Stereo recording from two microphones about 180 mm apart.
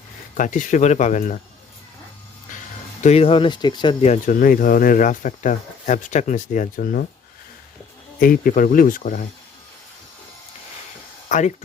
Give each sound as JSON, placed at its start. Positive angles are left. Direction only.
{"t": 0.3, "sound": "speech", "side_deg": 45}
{"t": 3.0, "sound": "speech", "side_deg": 35}
{"t": 4.0, "sound": "speech", "side_deg": 40}
{"t": 8.2, "sound": "speech", "side_deg": 50}
{"t": 11.3, "sound": "speech", "side_deg": 40}